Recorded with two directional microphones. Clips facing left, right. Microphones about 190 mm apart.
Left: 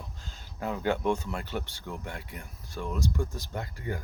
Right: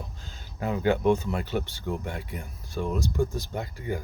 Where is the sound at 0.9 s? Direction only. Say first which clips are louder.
Right 5 dB; 20° right (ahead or behind).